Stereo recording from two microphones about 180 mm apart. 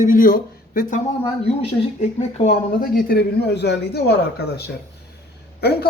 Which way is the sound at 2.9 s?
65° left (ahead or behind).